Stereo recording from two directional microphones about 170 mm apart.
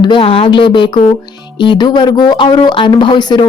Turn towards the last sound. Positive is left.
turn(degrees=25)  # may be behind; listen again after turning